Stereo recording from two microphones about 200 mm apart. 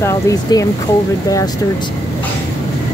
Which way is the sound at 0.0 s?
15° left (ahead or behind).